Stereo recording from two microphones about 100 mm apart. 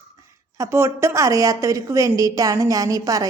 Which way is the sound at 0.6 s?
30° right (ahead or behind).